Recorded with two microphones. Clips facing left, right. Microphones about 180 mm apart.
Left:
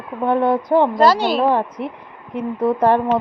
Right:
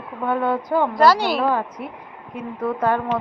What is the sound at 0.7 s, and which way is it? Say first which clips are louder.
Speech: left 2 dB; 25° left (ahead or behind).